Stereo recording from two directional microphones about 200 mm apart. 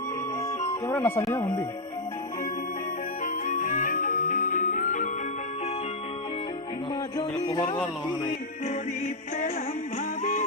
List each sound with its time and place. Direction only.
0.9 s speech: 10° left (ahead or behind)
3.4 s music: 40° left (ahead or behind)
7.2 s music: 20° left (ahead or behind)